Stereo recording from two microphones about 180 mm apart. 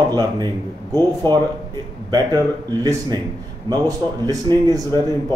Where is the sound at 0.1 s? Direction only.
20° right (ahead or behind).